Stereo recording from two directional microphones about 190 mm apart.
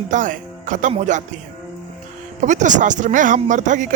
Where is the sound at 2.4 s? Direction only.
40° right (ahead or behind).